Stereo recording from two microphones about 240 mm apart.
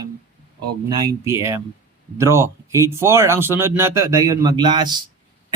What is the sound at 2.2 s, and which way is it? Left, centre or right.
Speech, centre.